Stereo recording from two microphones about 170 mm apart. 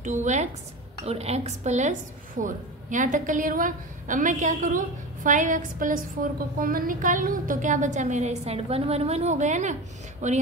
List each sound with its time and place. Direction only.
0.0 s a woman's voice: 45° right (ahead or behind)